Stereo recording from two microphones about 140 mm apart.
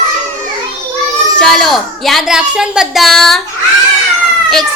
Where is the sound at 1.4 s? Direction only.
Centre (ahead or behind).